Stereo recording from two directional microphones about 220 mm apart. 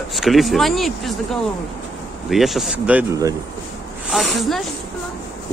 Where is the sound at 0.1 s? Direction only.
Centre (ahead or behind).